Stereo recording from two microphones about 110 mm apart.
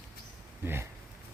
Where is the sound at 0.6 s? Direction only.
20° right (ahead or behind).